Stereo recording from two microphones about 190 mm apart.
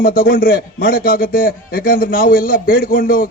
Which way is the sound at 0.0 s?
50° left (ahead or behind).